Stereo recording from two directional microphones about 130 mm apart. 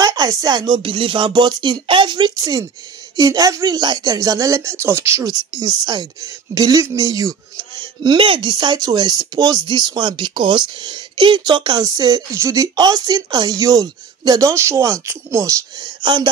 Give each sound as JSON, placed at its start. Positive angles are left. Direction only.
{"t": 0.0, "sound": "speech", "side_deg": -30}
{"t": 5.2, "sound": "speech", "side_deg": -30}
{"t": 16.0, "sound": "speech", "side_deg": -35}